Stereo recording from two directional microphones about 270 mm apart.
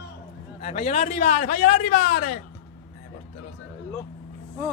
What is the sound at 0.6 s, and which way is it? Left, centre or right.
Speech, left.